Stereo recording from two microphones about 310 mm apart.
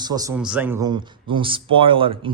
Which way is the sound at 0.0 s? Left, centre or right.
Centre.